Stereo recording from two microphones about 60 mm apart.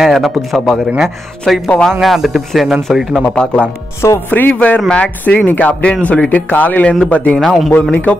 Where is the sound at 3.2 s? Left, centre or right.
Centre.